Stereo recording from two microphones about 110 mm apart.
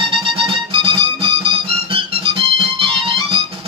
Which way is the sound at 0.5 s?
50° right (ahead or behind).